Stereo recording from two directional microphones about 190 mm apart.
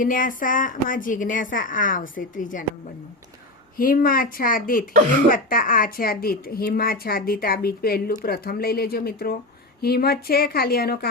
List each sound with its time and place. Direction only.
0.0 s a woman's voice: 45° left (ahead or behind)
3.8 s a woman's voice: 50° left (ahead or behind)